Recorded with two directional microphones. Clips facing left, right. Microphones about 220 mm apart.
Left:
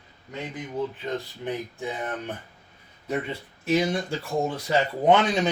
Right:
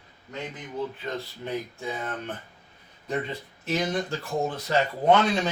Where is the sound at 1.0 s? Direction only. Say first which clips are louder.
Left 2 dB; 15° left (ahead or behind).